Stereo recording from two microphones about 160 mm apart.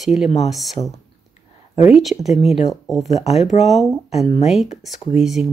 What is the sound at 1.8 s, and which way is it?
Speech, centre (ahead or behind).